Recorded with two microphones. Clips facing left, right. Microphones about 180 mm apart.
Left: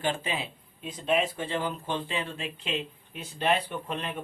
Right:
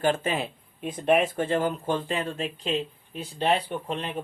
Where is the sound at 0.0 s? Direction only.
50° right (ahead or behind).